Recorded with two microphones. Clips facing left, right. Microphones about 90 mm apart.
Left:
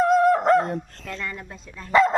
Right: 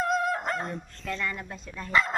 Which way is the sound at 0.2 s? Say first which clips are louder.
Left 11 dB; 80° left.